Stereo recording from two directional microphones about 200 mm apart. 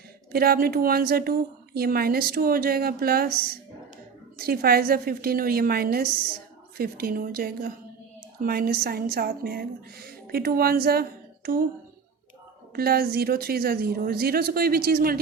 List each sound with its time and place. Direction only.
0.3 s speech: 50° right (ahead or behind)
12.7 s speech: 50° right (ahead or behind)